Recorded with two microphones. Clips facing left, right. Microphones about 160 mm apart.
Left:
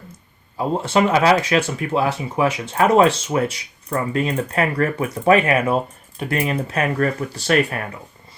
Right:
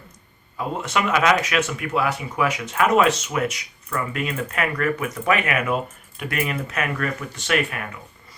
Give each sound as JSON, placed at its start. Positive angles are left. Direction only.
{"t": 0.5, "sound": "speech", "side_deg": 30}